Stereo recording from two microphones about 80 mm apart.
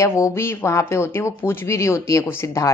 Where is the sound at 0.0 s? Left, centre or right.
Left.